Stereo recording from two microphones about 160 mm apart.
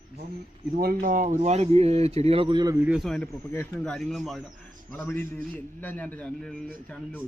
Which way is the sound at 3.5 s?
15° left (ahead or behind).